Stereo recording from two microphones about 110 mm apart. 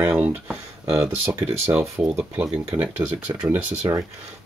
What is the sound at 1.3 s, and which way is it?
Speech, 20° right (ahead or behind).